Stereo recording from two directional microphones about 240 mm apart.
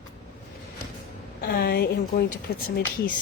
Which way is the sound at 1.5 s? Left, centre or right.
Left.